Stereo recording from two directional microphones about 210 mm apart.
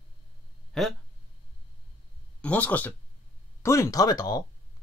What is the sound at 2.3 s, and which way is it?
Speech, 5° left (ahead or behind).